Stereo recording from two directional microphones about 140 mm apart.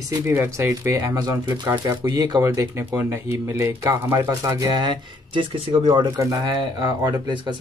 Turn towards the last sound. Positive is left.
turn(degrees=-30)  # may be behind; listen again after turning